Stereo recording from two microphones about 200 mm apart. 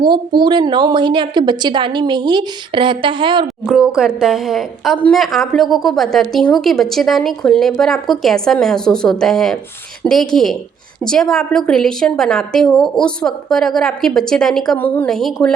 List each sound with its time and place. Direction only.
0.0 s a woman's voice: 20° right (ahead or behind)
3.7 s a woman's voice: 5° right (ahead or behind)